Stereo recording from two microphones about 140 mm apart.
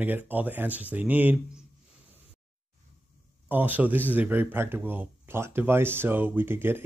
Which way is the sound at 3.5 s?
15° right (ahead or behind).